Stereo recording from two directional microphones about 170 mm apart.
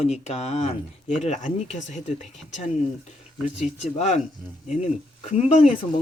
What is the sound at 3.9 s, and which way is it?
Speech, 40° left (ahead or behind).